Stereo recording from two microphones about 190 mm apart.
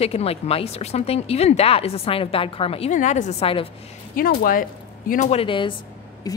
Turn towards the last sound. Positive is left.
turn(degrees=20)  # may be behind; listen again after turning